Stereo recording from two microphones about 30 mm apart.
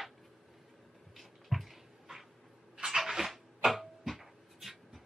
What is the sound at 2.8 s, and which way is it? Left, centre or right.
Dog, centre.